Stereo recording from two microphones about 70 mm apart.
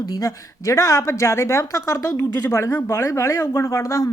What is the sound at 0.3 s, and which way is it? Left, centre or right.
Speech, left.